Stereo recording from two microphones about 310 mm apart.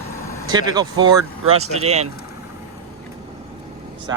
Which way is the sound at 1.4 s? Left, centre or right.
Right.